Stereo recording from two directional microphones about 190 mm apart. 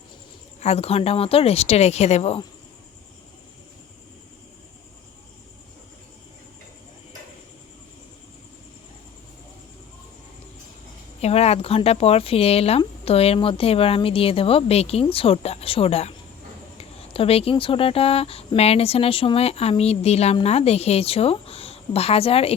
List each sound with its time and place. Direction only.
0.6 s speech: 35° left (ahead or behind)
11.2 s speech: 35° left (ahead or behind)